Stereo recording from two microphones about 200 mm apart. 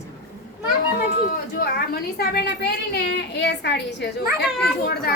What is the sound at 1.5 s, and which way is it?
A woman's voice, 50° left (ahead or behind).